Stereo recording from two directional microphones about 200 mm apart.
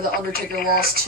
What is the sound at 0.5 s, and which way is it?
Speech, 50° left (ahead or behind).